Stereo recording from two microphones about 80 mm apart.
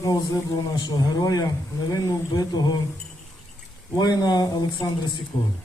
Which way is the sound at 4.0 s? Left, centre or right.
Left.